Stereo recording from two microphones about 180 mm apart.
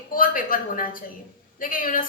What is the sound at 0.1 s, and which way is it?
A woman's voice, 50° left (ahead or behind).